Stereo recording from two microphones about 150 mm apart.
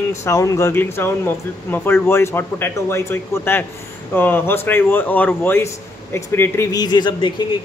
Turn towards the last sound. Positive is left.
turn(degrees=30)  # may be behind; listen again after turning